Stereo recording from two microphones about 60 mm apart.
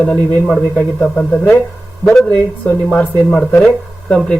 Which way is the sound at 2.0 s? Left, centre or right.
Centre.